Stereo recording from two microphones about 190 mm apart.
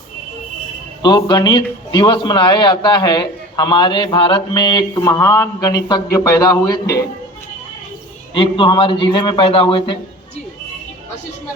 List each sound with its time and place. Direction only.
1.0 s a man's voice: 25° left (ahead or behind)
8.3 s a man's voice: 25° left (ahead or behind)